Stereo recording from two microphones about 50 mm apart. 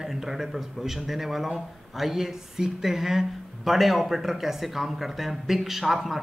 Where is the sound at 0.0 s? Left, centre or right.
Centre.